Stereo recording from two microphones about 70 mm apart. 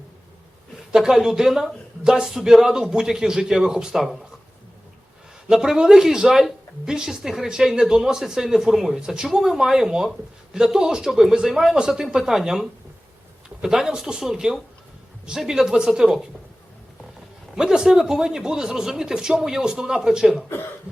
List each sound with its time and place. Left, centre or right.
0.9 s a woman's voice: centre
5.5 s a woman's voice: centre
17.5 s a woman's voice: centre